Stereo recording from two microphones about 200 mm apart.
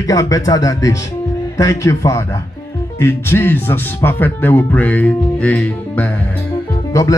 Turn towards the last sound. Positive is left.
turn(degrees=15)  # may be behind; listen again after turning